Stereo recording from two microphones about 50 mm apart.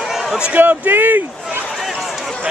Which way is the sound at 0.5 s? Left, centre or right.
Right.